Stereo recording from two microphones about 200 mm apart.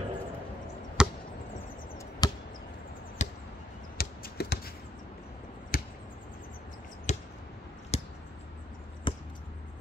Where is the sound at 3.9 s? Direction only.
50° left (ahead or behind).